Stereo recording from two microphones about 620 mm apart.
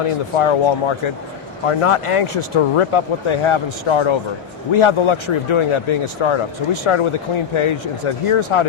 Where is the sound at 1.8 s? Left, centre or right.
Left.